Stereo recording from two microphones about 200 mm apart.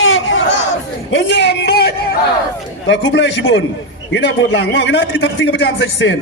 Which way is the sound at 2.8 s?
65° left (ahead or behind).